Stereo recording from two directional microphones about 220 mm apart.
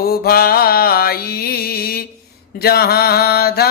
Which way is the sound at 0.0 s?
45° left (ahead or behind).